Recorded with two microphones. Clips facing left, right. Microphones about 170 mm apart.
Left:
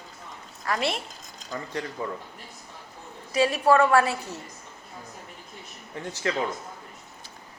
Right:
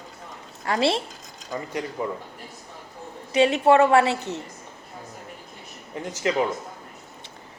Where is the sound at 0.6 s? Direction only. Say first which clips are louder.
Right 5 dB; 30° right (ahead or behind).